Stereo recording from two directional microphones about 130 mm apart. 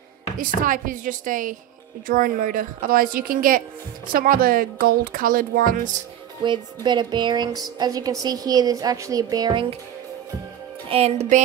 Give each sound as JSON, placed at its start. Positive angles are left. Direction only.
{"t": 0.4, "sound": "speech", "side_deg": -90}
{"t": 6.4, "sound": "a woman's voice", "side_deg": -35}
{"t": 10.9, "sound": "music", "side_deg": -55}